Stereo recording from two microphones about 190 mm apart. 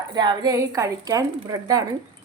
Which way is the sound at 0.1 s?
25° right (ahead or behind).